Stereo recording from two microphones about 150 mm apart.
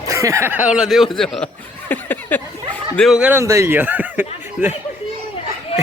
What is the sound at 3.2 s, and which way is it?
Speech, 15° right (ahead or behind).